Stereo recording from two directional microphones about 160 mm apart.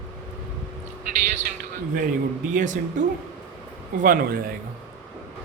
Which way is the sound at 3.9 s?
60° right (ahead or behind).